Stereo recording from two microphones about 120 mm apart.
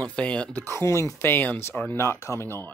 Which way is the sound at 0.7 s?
20° left (ahead or behind).